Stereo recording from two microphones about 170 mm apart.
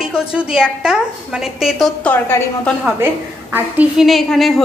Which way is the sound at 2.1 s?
10° left (ahead or behind).